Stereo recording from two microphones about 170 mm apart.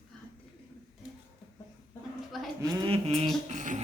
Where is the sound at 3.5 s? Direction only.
45° right (ahead or behind).